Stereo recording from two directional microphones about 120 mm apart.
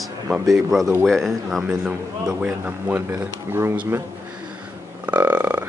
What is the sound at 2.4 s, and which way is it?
Speech, 15° right (ahead or behind).